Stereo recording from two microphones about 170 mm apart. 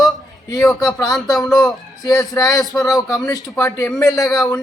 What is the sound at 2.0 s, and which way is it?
A man's voice, 20° left (ahead or behind).